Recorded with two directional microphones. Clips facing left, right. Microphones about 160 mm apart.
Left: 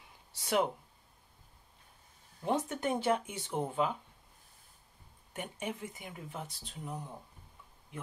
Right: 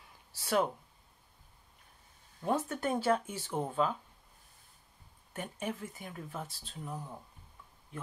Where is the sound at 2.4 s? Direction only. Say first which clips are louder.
Even; 20° left (ahead or behind).